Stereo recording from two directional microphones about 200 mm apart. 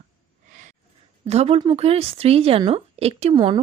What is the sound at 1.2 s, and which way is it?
Speech, 30° right (ahead or behind).